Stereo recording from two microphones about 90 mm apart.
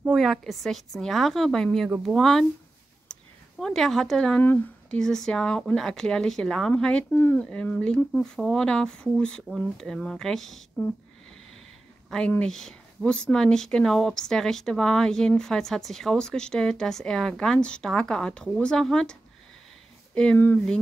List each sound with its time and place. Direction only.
0.0 s a sound: 5° right (ahead or behind)
0.4 s speech: centre (ahead or behind)
3.1 s a sound: 5° left (ahead or behind)
4.9 s speech: 5° left (ahead or behind)
7.1 s speech: 25° left (ahead or behind)
7.3 s speech: 10° left (ahead or behind)
12.3 s speech: 10° left (ahead or behind)
20.3 s speech: 20° left (ahead or behind)